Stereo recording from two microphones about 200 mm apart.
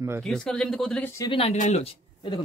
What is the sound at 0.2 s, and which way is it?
Speech, 5° left (ahead or behind).